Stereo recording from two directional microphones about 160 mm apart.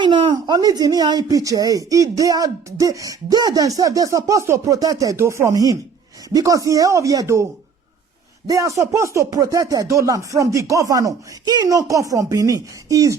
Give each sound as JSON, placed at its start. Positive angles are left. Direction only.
{"t": 0.0, "sound": "speech", "side_deg": -30}
{"t": 8.4, "sound": "speech", "side_deg": -20}